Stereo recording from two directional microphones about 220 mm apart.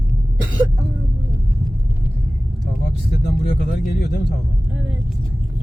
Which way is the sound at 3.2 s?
50° left (ahead or behind).